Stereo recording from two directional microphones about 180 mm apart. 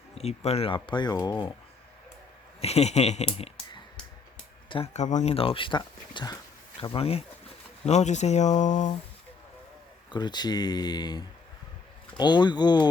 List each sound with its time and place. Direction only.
0.1 s speech: 35° left (ahead or behind)
2.6 s speech: 35° left (ahead or behind)
10.1 s speech: 25° left (ahead or behind)